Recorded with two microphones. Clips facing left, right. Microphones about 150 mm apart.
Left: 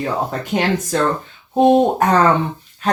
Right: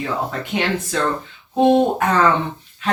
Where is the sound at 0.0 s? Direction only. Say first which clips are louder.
Left 2 dB; 40° left (ahead or behind).